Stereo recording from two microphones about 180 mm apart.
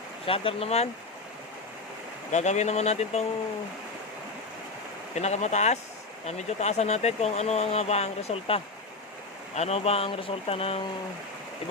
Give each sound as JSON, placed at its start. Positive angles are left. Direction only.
{"t": 0.3, "sound": "speech", "side_deg": 30}
{"t": 2.3, "sound": "speech", "side_deg": 40}
{"t": 5.1, "sound": "speech", "side_deg": 40}